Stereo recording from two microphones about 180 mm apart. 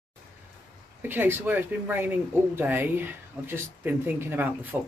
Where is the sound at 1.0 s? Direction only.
10° right (ahead or behind).